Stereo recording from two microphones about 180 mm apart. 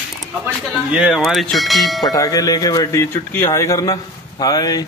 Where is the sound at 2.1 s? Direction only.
20° left (ahead or behind).